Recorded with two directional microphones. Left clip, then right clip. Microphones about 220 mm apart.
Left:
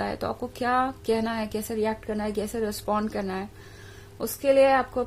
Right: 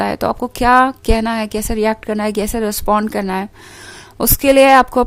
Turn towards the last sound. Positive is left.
turn(degrees=-45)  # may be behind; listen again after turning